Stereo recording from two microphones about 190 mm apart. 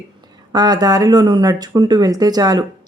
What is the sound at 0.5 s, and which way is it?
Speech, 20° right (ahead or behind).